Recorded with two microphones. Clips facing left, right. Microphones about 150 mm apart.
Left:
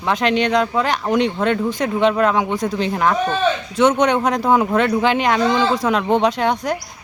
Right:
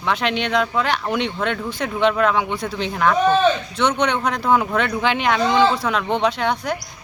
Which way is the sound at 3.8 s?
45° left (ahead or behind).